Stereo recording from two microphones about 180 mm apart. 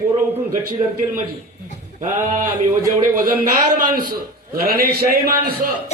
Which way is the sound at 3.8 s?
50° right (ahead or behind).